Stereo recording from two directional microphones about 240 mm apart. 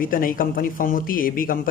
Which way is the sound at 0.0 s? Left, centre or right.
Left.